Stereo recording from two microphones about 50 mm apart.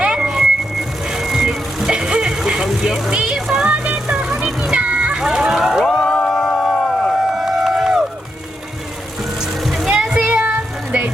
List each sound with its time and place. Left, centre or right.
0.0 s vehicle: right
0.3 s vehicle: centre
3.1 s music: centre
4.7 s vehicle: right
5.1 s a sound: centre
6.1 s music: centre
9.6 s music: centre
9.9 s a sound: centre